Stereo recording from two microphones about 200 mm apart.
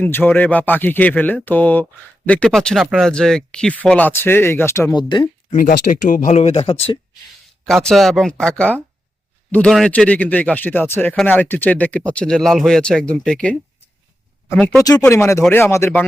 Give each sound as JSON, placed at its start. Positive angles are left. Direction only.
{"t": 0.0, "sound": "speech", "side_deg": 10}
{"t": 5.5, "sound": "speech", "side_deg": 40}
{"t": 7.6, "sound": "speech", "side_deg": 0}
{"t": 14.8, "sound": "speech", "side_deg": 20}